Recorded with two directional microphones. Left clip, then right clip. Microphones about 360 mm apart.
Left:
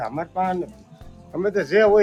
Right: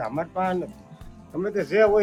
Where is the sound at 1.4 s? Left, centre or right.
Left.